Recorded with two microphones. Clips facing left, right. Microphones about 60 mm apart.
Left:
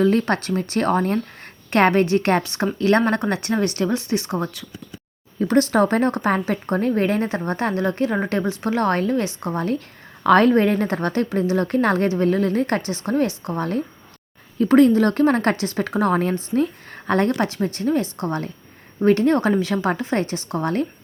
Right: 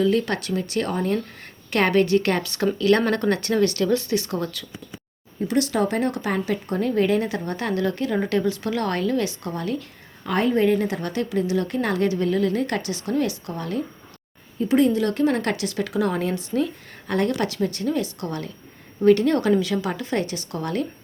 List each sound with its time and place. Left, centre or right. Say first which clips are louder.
0.0 s speech: left 3 dB; left
5.5 s speech: left 5 dB; left
10.2 s speech: left 5 dB; left
14.6 s speech: left 5 dB; left